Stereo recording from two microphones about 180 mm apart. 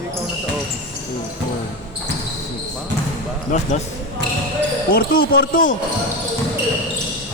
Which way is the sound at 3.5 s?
45° left (ahead or behind).